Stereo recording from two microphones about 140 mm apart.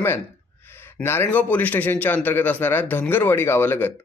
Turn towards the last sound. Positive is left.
turn(degrees=15)  # may be behind; listen again after turning